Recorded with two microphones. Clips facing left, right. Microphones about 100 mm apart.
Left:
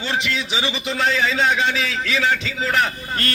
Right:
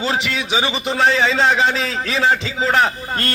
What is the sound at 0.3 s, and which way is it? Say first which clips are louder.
A man's voice: right 4 dB; 40° right (ahead or behind).